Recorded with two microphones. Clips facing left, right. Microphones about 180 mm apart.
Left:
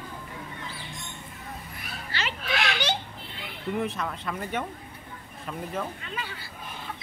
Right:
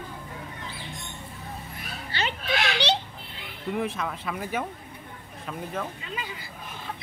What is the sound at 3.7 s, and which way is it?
A man's voice, centre (ahead or behind).